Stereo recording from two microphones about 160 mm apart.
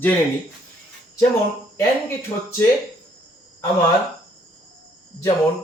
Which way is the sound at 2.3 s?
30° left (ahead or behind).